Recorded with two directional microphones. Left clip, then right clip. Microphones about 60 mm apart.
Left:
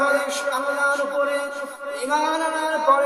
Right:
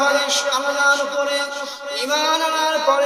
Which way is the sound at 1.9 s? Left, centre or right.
Centre.